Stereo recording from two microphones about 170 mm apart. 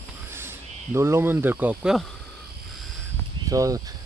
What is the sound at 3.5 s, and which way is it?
Speech, 20° right (ahead or behind).